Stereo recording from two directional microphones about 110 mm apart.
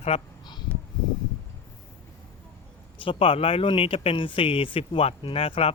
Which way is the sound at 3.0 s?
55° left (ahead or behind).